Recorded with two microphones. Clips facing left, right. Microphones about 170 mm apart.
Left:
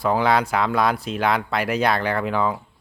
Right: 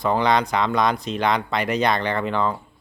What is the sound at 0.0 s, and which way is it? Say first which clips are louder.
A man's voice: even; 5° left (ahead or behind).